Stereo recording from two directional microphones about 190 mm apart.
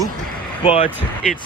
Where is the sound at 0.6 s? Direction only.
30° left (ahead or behind).